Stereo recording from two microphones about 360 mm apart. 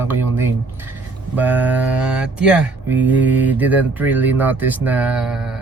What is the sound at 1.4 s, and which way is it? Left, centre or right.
Speech, centre.